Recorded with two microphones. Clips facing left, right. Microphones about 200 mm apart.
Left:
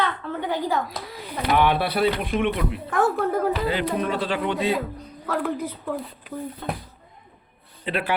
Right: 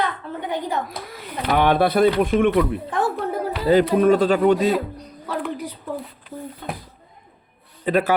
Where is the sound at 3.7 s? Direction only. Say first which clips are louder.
Right 9 dB; 45° right (ahead or behind).